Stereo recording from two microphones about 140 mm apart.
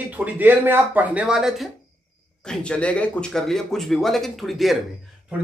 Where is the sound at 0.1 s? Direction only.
10° right (ahead or behind).